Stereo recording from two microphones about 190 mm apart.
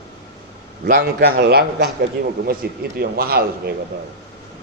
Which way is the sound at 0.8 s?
55° right (ahead or behind).